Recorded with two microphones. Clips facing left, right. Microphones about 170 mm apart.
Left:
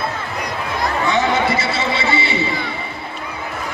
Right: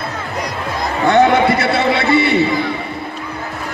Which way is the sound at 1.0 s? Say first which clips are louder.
Right 8 dB; 60° right (ahead or behind).